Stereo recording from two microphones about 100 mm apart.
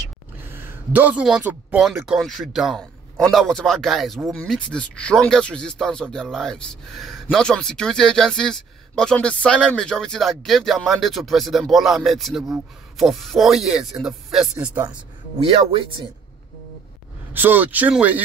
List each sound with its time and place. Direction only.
0.4 s a sound: 20° right (ahead or behind)
1.4 s speech: 20° right (ahead or behind)
2.1 s speech: centre (ahead or behind)
15.3 s speech: 60° right (ahead or behind)
17.3 s speech: 20° right (ahead or behind)